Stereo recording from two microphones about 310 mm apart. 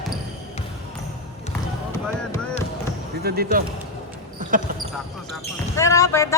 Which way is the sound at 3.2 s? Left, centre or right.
Right.